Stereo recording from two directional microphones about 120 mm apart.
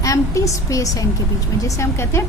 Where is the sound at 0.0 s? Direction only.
25° left (ahead or behind).